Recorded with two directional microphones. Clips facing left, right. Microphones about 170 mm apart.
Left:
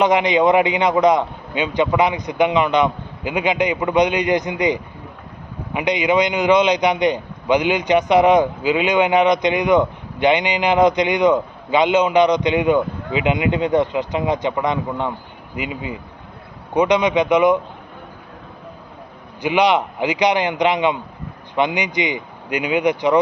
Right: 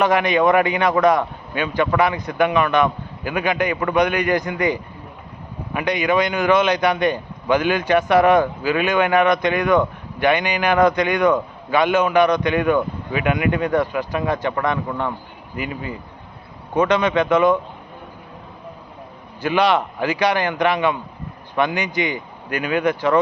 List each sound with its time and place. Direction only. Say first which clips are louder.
0.0 s a man's voice: left 1 dB; 20° left (ahead or behind)
19.4 s a man's voice: left 1 dB; 15° left (ahead or behind)